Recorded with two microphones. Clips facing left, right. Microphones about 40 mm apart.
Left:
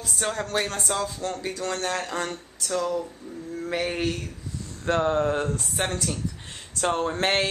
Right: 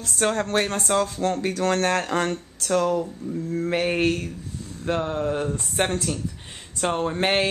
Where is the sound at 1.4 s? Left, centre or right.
Right.